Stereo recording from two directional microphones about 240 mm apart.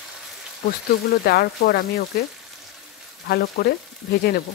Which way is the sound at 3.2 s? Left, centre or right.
Left.